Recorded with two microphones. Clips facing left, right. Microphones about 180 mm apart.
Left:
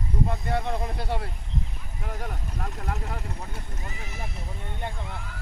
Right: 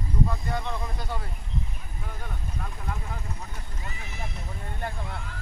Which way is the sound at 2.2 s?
75° left (ahead or behind).